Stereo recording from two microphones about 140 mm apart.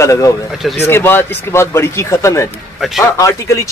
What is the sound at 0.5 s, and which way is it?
Speech, 5° right (ahead or behind).